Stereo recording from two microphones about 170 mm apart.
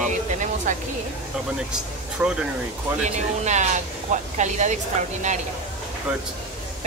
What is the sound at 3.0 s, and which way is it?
Speech, 45° right (ahead or behind).